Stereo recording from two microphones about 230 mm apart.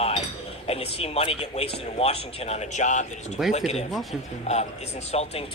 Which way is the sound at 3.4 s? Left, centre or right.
Centre.